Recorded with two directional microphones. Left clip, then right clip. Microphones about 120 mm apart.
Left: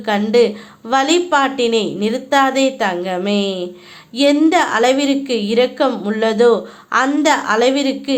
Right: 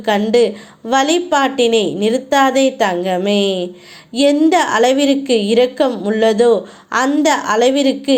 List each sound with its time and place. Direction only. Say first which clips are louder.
0.3 s a woman's voice: even; 25° right (ahead or behind)
5.9 s speech: right 2 dB; 10° right (ahead or behind)
6.1 s a woman's voice: right 1 dB; 25° right (ahead or behind)